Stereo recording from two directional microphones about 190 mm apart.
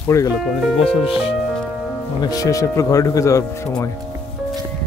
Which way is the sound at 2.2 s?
20° left (ahead or behind).